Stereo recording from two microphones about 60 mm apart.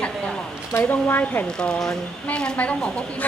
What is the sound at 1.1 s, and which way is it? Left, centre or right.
A woman's voice, left.